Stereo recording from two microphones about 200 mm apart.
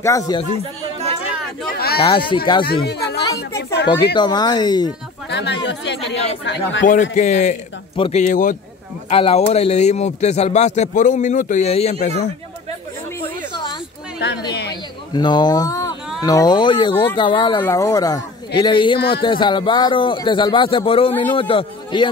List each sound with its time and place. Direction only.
0.0 s speech: 15° left (ahead or behind)
1.8 s speech: 50° left (ahead or behind)
2.0 s a man's voice: 25° left (ahead or behind)
2.6 s a woman's voice: 55° left (ahead or behind)
4.1 s a man's voice: 20° left (ahead or behind)
5.3 s speech: 60° left (ahead or behind)
6.9 s a man's voice: 35° left (ahead or behind)
9.1 s a man's voice: 30° left (ahead or behind)
14.5 s a sound: 55° left (ahead or behind)
15.1 s a man's voice: 20° left (ahead or behind)